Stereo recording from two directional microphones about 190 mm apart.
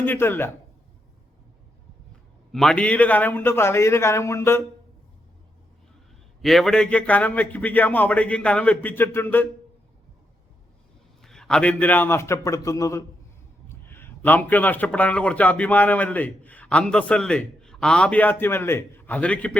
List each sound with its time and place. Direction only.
0.0 s a man's voice: 10° left (ahead or behind)
2.5 s a man's voice: centre (ahead or behind)
6.4 s a man's voice: centre (ahead or behind)
11.2 s a man's voice: 5° left (ahead or behind)